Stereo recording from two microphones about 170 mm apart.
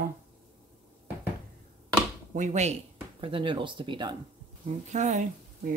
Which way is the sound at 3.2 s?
30° right (ahead or behind).